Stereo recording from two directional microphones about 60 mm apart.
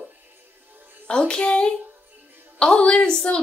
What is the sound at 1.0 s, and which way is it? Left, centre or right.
A woman's voice, centre.